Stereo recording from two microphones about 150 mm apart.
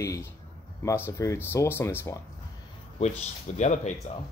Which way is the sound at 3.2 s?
50° left (ahead or behind).